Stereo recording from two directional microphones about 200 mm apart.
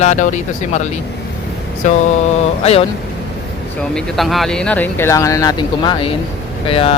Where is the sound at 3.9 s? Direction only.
Centre (ahead or behind).